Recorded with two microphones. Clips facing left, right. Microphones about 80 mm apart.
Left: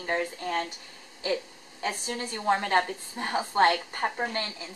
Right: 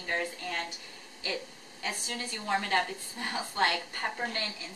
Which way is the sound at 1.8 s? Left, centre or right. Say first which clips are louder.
Left 5 dB; left.